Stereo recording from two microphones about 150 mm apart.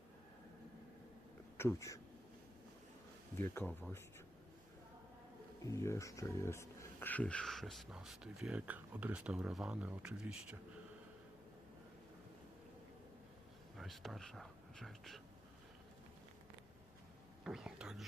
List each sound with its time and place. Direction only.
1.5 s speech: 20° left (ahead or behind)
3.3 s speech: 10° left (ahead or behind)
5.6 s speech: 20° left (ahead or behind); by 10.3 s 5° right (ahead or behind)
13.7 s speech: centre (ahead or behind)
17.4 s whispering: 5° right (ahead or behind)